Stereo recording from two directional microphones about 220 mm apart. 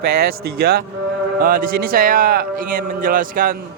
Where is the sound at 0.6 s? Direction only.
45° right (ahead or behind).